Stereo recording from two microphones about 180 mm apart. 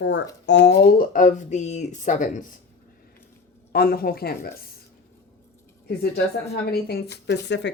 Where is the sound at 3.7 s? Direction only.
55° left (ahead or behind).